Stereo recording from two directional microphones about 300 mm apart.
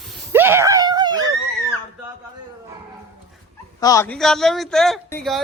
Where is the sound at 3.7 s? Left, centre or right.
Centre.